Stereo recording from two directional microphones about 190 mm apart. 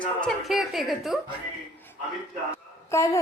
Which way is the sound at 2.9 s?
15° left (ahead or behind).